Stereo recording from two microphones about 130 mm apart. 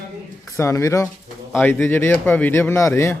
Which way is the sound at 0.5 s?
20° left (ahead or behind).